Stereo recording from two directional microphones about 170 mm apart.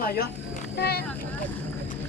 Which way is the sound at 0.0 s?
65° left (ahead or behind).